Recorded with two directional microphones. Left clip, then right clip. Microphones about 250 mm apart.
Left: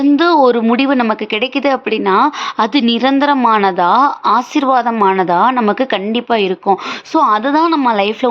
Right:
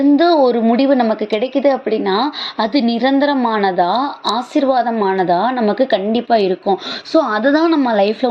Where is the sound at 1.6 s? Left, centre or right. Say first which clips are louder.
Right 1 dB; centre.